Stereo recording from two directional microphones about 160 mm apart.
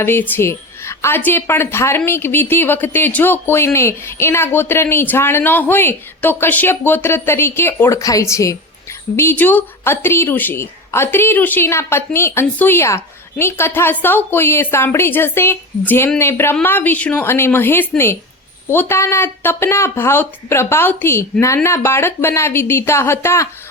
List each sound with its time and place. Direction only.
0.0 s speech: 15° left (ahead or behind)